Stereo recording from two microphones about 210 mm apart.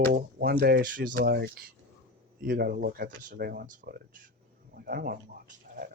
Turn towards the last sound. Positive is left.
turn(degrees=-45)  # may be behind; listen again after turning